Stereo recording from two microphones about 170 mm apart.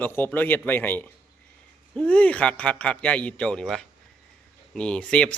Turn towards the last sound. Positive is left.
turn(degrees=5)  # may be behind; listen again after turning